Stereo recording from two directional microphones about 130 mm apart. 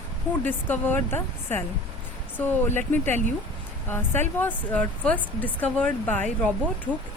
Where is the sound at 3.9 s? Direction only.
15° left (ahead or behind).